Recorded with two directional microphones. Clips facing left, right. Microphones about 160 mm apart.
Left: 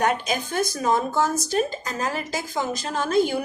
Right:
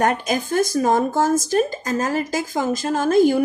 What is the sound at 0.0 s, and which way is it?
Speech, 45° right (ahead or behind).